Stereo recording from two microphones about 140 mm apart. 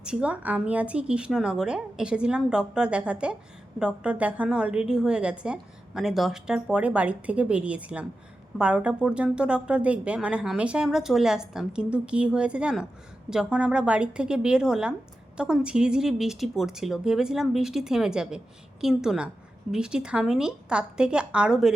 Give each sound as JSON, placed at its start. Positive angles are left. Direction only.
{"t": 0.0, "sound": "a woman's voice", "side_deg": -5}